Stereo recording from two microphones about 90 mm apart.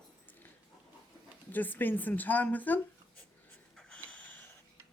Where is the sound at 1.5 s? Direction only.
20° left (ahead or behind).